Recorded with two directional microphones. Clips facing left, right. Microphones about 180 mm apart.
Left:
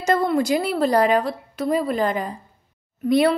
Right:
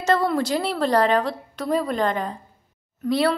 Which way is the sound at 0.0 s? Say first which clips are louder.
Left 1 dB; 10° left (ahead or behind).